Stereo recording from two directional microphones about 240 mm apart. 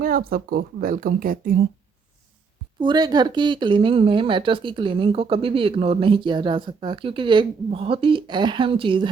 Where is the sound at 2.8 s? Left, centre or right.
Centre.